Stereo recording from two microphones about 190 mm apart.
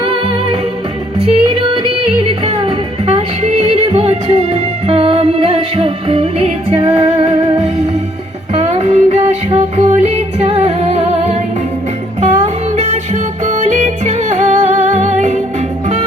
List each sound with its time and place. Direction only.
0.0 s music: 30° right (ahead or behind)
12.4 s music: 35° right (ahead or behind)